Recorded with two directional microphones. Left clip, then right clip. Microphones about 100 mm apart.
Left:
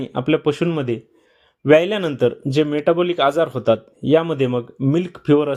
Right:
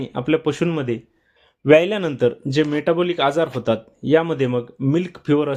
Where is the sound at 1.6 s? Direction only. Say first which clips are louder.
Even; centre (ahead or behind); by 5.5 s 20° left (ahead or behind).